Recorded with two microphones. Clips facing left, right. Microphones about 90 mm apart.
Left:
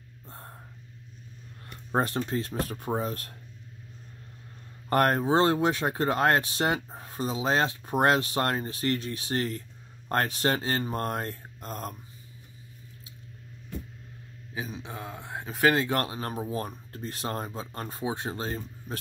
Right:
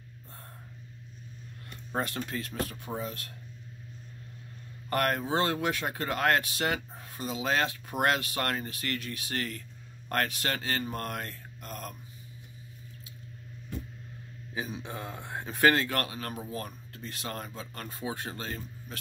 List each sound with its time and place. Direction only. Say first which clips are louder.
1.9 s speech: left 6 dB; 35° left (ahead or behind)
4.8 s speech: left 5 dB; 35° left (ahead or behind)
14.5 s a man's voice: even; centre (ahead or behind)
15.7 s speech: left 3 dB; 20° left (ahead or behind)